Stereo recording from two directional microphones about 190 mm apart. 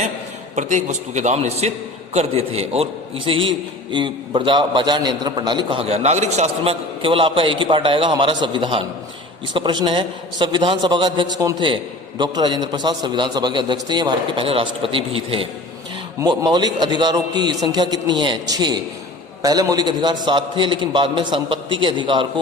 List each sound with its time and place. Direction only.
0.5 s a man's voice: 40° right (ahead or behind)